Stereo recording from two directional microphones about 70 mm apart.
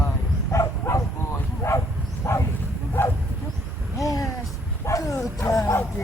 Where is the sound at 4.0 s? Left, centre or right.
Left.